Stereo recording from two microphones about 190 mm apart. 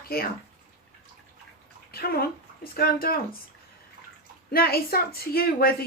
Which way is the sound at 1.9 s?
55° left (ahead or behind).